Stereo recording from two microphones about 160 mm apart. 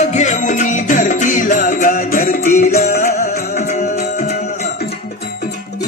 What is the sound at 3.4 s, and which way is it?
Music, 50° left (ahead or behind).